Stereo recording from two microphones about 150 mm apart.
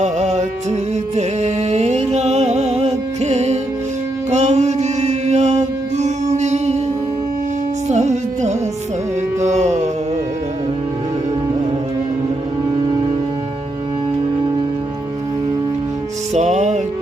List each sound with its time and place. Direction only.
0.0 s music: 50° right (ahead or behind)
7.9 s music: 50° right (ahead or behind)
16.3 s music: 50° right (ahead or behind)